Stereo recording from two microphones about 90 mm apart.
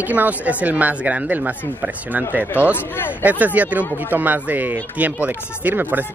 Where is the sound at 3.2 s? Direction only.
15° right (ahead or behind).